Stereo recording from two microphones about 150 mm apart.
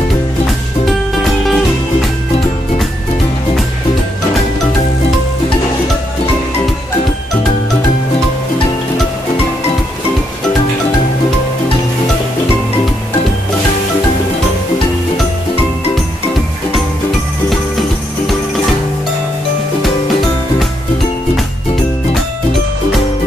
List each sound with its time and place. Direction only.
0.8 s music: centre (ahead or behind)